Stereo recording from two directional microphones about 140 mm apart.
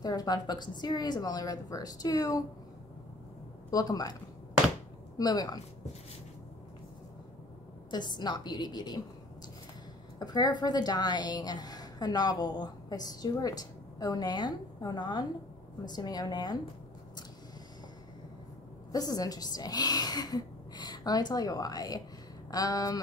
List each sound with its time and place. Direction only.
0.0 s a woman's voice: 30° left (ahead or behind)
3.7 s a woman's voice: 25° left (ahead or behind)
7.9 s a woman's voice: 30° left (ahead or behind)
10.1 s a woman's voice: 30° left (ahead or behind)
18.9 s a woman's voice: 25° left (ahead or behind)